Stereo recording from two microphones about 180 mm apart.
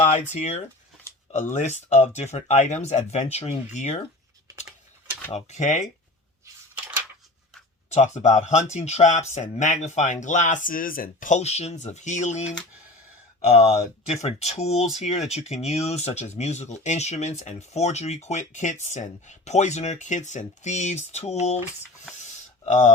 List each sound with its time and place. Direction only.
0.1 s speech: 40° left (ahead or behind)
5.3 s speech: 40° left (ahead or behind)
7.9 s speech: 40° left (ahead or behind)
13.5 s speech: 35° left (ahead or behind)